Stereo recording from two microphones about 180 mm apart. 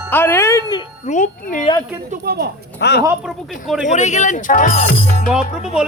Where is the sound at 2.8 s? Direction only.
70° left (ahead or behind).